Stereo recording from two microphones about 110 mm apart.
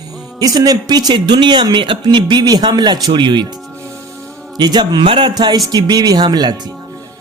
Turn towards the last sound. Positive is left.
turn(degrees=-40)  # may be behind; listen again after turning